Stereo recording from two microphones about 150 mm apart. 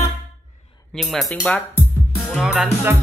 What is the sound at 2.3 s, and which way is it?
Speech, 5° right (ahead or behind).